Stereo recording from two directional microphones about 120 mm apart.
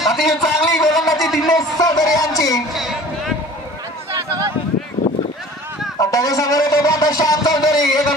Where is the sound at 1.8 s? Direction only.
30° left (ahead or behind).